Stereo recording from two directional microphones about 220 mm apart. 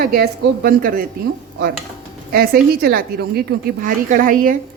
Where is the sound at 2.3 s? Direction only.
45° right (ahead or behind).